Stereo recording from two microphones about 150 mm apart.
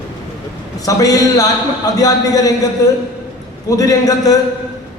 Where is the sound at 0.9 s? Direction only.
25° left (ahead or behind).